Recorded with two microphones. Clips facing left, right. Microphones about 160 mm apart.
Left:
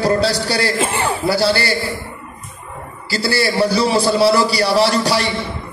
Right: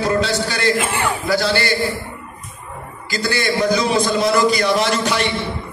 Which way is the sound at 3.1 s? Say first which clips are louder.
Left 2 dB; 35° left (ahead or behind).